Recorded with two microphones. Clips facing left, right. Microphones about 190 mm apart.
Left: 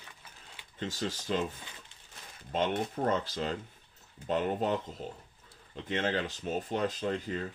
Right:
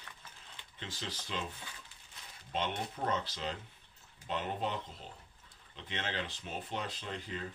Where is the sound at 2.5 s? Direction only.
50° left (ahead or behind).